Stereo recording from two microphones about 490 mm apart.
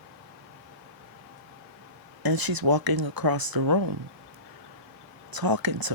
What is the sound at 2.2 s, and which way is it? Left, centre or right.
Speech, right.